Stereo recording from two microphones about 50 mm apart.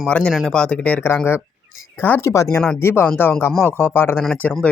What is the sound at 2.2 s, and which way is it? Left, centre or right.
Speech, left.